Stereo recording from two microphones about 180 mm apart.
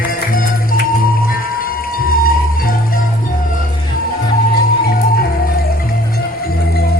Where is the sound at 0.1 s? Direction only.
55° left (ahead or behind).